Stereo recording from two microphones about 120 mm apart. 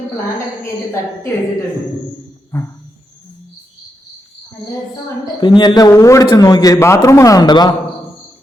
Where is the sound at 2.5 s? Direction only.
20° left (ahead or behind).